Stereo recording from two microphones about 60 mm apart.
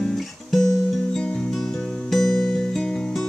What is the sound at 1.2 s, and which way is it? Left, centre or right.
Music, centre.